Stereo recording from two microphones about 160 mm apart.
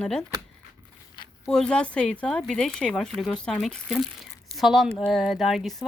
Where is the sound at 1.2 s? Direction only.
30° left (ahead or behind).